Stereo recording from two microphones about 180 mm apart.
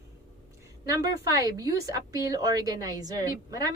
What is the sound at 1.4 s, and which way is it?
A woman's voice, 20° right (ahead or behind).